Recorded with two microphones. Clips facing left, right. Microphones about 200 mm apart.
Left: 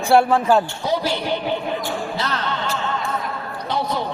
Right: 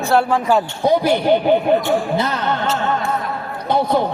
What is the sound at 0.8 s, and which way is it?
Speech, 55° right (ahead or behind).